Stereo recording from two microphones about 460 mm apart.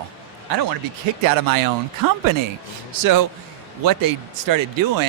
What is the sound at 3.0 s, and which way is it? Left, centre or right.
A man's voice, right.